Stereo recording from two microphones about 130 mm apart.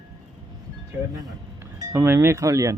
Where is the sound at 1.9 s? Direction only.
20° right (ahead or behind).